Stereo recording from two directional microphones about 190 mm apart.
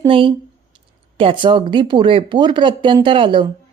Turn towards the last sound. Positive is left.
turn(degrees=-25)  # may be behind; listen again after turning